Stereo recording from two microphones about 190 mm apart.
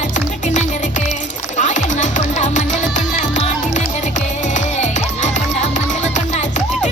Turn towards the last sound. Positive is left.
turn(degrees=40)  # may be behind; listen again after turning